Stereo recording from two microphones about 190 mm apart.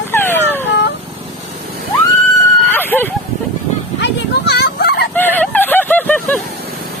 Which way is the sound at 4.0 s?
60° left (ahead or behind).